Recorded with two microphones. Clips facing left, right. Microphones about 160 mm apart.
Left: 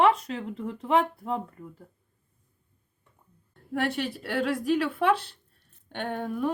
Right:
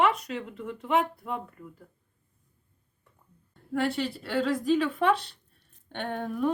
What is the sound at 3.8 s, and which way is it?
A woman's voice, 10° left (ahead or behind).